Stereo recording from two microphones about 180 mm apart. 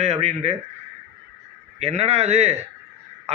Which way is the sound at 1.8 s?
35° right (ahead or behind).